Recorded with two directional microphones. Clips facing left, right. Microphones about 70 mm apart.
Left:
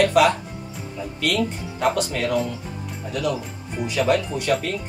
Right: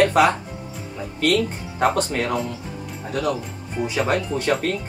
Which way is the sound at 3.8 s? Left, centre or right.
Right.